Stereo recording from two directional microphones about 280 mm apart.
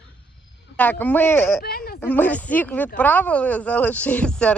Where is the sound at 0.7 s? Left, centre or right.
Centre.